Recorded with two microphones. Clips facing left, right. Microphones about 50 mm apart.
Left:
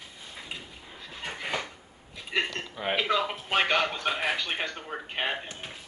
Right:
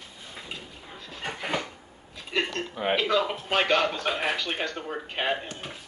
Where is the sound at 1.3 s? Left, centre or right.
Centre.